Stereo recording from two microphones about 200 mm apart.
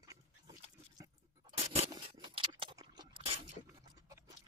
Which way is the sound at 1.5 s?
30° right (ahead or behind).